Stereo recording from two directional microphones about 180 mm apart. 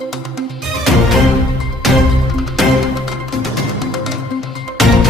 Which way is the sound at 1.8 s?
Centre (ahead or behind).